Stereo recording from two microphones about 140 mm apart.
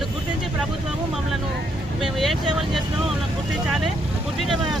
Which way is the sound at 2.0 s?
5° right (ahead or behind).